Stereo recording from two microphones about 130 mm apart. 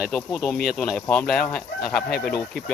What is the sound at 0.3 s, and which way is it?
Speech, 10° left (ahead or behind).